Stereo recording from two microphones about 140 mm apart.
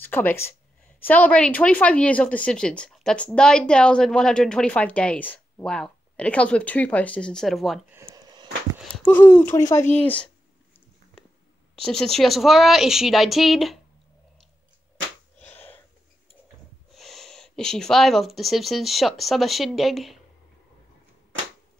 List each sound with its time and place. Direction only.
0.0 s speech: 15° left (ahead or behind)
7.9 s a sound: 25° right (ahead or behind)
8.9 s speech: 10° left (ahead or behind)
11.7 s a woman's voice: 5° left (ahead or behind)
15.3 s wheeze: 15° left (ahead or behind)
16.9 s speech: centre (ahead or behind)